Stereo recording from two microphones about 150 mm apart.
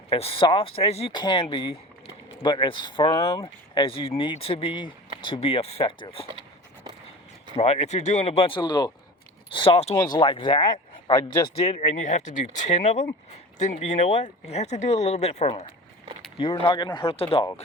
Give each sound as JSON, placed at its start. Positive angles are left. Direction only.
{"t": 0.1, "sound": "speech", "side_deg": 40}
{"t": 7.5, "sound": "speech", "side_deg": 45}
{"t": 9.9, "sound": "speech", "side_deg": 30}
{"t": 11.1, "sound": "speech", "side_deg": 15}
{"t": 11.5, "sound": "speech", "side_deg": 40}
{"t": 11.8, "sound": "speech", "side_deg": 55}